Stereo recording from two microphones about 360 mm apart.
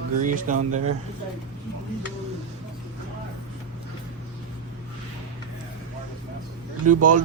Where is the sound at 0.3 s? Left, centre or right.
Right.